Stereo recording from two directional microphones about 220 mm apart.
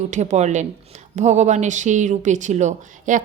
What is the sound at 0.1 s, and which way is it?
A woman's voice, 30° right (ahead or behind).